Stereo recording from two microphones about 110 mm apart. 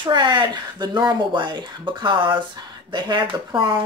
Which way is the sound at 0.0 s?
45° right (ahead or behind).